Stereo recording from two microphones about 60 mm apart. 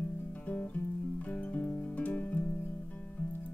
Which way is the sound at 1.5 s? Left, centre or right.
Left.